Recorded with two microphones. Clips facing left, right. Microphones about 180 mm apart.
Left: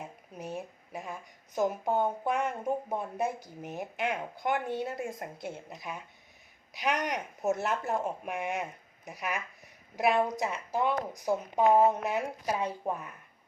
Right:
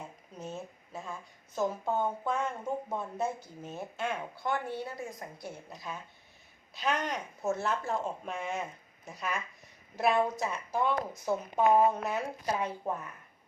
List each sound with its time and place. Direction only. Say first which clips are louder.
0.3 s speech: left 2 dB; 15° left (ahead or behind)